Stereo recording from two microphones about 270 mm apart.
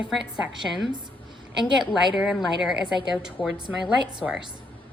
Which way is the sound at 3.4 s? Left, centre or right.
Centre.